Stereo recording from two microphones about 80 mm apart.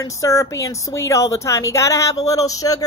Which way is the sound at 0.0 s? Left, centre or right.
Left.